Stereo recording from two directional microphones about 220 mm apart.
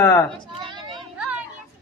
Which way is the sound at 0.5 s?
20° right (ahead or behind).